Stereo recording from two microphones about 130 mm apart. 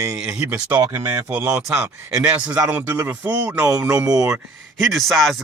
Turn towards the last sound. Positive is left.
turn(degrees=0)  # may be behind; listen again after turning